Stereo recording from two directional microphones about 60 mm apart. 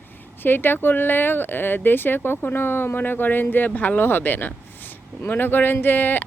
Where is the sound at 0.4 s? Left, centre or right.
Left.